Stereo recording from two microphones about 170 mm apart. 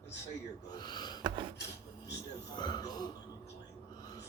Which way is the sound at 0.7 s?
25° left (ahead or behind).